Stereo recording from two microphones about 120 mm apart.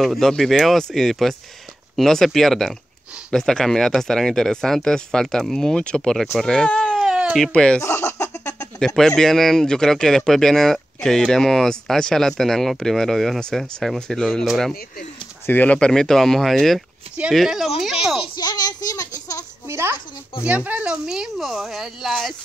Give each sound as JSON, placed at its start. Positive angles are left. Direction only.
{"t": 0.0, "sound": "speech", "side_deg": 0}
{"t": 7.0, "sound": "baby cry", "side_deg": -5}
{"t": 7.8, "sound": "a sound", "side_deg": 20}
{"t": 8.7, "sound": "speech", "side_deg": 5}
{"t": 15.4, "sound": "speech", "side_deg": 15}
{"t": 18.3, "sound": "a child's voice", "side_deg": 35}
{"t": 19.7, "sound": "a child's voice", "side_deg": -20}